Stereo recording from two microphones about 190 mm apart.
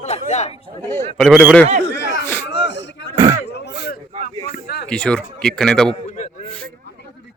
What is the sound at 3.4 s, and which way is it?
Speech, 60° left (ahead or behind).